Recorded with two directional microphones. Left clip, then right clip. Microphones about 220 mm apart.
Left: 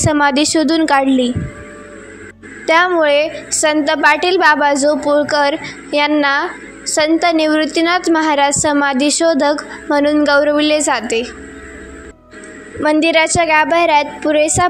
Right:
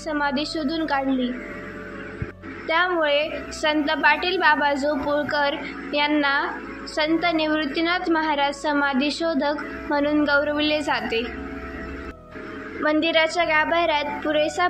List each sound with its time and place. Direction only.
0.0 s a woman's voice: 50° left (ahead or behind)
2.6 s a woman's voice: 45° left (ahead or behind)
12.8 s a woman's voice: 40° left (ahead or behind)